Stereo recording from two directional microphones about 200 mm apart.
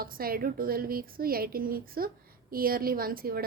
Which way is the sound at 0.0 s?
45° right (ahead or behind).